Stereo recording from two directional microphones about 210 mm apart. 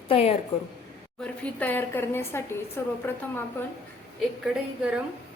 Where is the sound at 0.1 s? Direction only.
30° left (ahead or behind).